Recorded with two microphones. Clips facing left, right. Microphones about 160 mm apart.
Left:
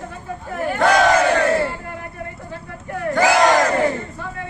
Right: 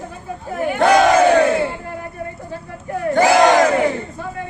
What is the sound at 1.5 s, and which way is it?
Battle cry, centre (ahead or behind).